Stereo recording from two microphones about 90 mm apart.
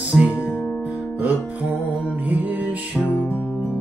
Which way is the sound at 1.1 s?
15° right (ahead or behind).